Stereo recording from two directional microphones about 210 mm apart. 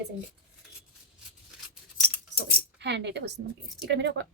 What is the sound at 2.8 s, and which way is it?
Speech, 55° right (ahead or behind).